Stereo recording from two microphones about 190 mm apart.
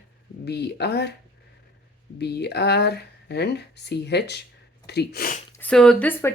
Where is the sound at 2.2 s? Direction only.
60° left (ahead or behind).